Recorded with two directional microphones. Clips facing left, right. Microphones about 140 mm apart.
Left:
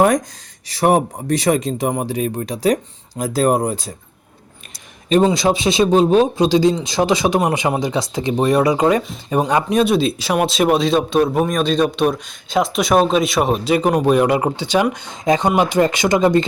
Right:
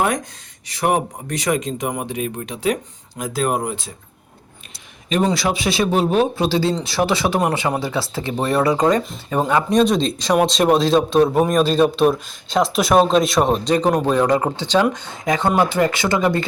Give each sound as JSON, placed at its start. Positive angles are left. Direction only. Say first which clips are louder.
{"t": 0.0, "sound": "speech", "louder": "left 6 dB", "side_deg": 40}
{"t": 5.0, "sound": "speech", "louder": "left 5 dB", "side_deg": 35}
{"t": 5.3, "sound": "a man's voice", "louder": "left 4 dB", "side_deg": 20}
{"t": 9.7, "sound": "a man's voice", "louder": "even", "side_deg": 5}